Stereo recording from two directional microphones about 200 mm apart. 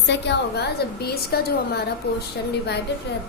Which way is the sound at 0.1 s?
60° left (ahead or behind).